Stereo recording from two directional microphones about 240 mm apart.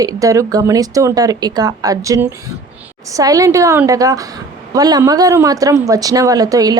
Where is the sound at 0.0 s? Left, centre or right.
Centre.